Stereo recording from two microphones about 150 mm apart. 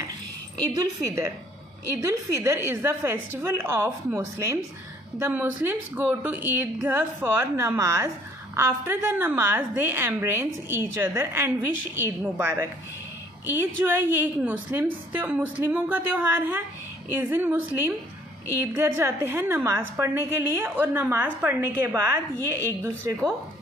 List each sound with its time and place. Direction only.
0.6 s a woman's voice: 25° right (ahead or behind)